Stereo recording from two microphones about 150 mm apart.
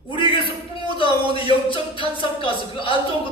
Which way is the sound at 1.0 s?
35° left (ahead or behind).